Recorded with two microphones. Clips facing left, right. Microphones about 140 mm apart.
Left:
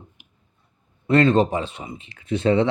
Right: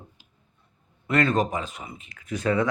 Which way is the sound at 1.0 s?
30° left (ahead or behind).